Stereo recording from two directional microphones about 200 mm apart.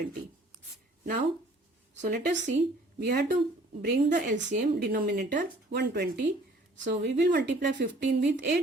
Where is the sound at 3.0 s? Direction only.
55° right (ahead or behind).